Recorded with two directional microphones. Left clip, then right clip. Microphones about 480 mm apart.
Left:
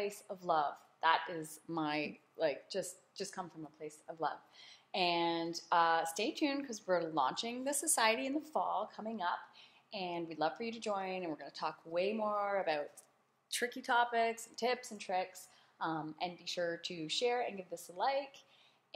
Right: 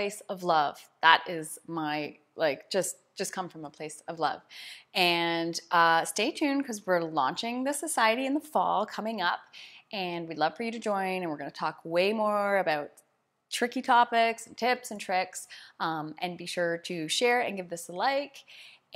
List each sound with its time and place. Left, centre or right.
0.0 s a woman's voice: right